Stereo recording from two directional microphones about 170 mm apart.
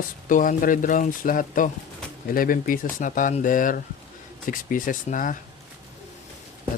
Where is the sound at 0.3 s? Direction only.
50° left (ahead or behind).